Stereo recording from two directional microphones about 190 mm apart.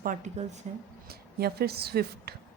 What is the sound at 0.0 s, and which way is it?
Speech, 40° right (ahead or behind).